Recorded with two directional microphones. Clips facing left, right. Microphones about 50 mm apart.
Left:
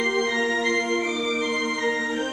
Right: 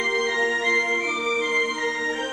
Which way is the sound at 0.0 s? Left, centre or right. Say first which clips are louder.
Even; centre.